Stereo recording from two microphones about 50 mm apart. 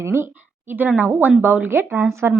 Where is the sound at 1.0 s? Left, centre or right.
Right.